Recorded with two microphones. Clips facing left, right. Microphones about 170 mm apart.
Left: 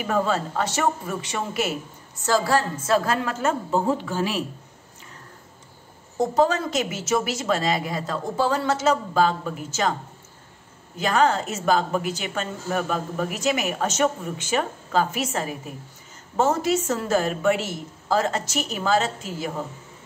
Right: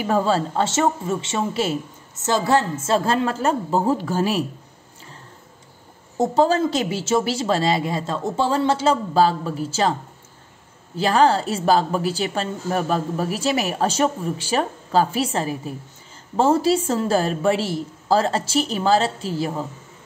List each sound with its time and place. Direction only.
0.0 s a man's voice: 30° right (ahead or behind)
6.1 s a man's voice: 30° right (ahead or behind)
11.0 s a man's voice: 35° right (ahead or behind)